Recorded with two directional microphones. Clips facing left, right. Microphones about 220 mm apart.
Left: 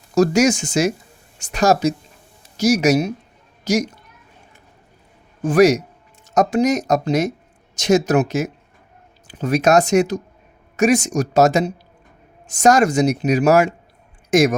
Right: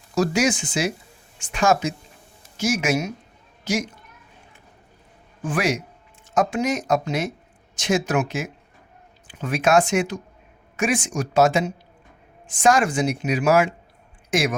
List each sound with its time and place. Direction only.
0.1 s a woman's voice: 45° left (ahead or behind)
5.4 s a man's voice: 40° left (ahead or behind)